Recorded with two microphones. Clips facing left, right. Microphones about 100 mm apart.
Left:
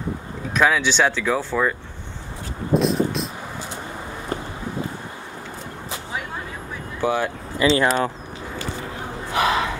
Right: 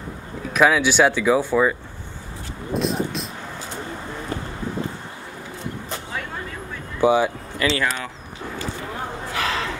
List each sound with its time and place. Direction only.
0.5 s speech: 5° right (ahead or behind)
2.7 s vehicle: centre (ahead or behind)
7.0 s speech: 15° right (ahead or behind)
7.5 s speech: 30° left (ahead or behind)
9.3 s speech: 20° left (ahead or behind)